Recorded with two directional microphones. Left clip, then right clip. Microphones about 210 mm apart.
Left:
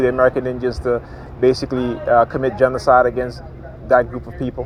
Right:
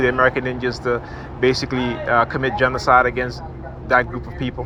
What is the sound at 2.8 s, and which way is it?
Speech, 25° left (ahead or behind).